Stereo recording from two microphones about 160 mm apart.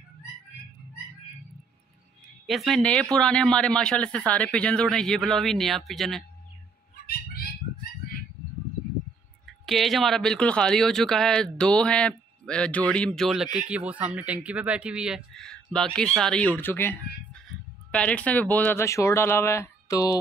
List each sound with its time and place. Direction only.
2.4 s speech: centre (ahead or behind)
9.7 s speech: centre (ahead or behind); by 20.2 s 20° left (ahead or behind)